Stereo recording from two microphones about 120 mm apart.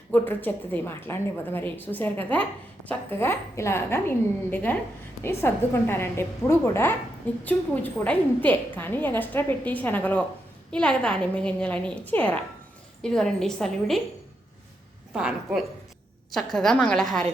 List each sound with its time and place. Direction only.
0.1 s a woman's voice: 15° left (ahead or behind)
15.1 s a woman's voice: 5° right (ahead or behind)
16.3 s a woman's voice: 5° left (ahead or behind)